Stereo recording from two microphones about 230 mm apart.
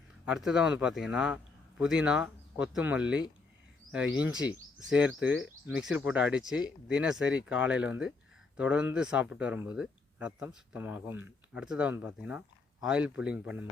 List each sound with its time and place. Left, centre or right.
0.3 s speech: centre